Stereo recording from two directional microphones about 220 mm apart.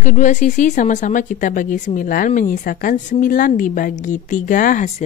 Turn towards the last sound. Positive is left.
turn(degrees=35)  # may be behind; listen again after turning